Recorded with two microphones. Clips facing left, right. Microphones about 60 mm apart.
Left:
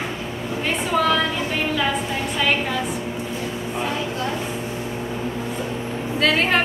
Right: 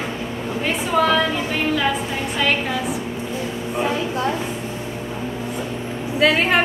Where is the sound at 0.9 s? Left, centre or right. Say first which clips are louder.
Right 2 dB; centre.